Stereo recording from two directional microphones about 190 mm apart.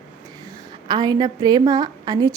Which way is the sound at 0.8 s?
20° right (ahead or behind).